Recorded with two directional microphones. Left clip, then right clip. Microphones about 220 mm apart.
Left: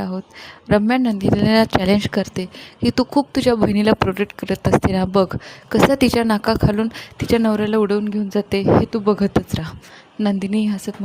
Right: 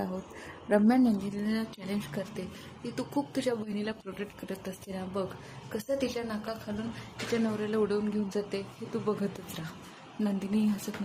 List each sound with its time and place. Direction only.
0.7 s a woman's voice: 40° left (ahead or behind)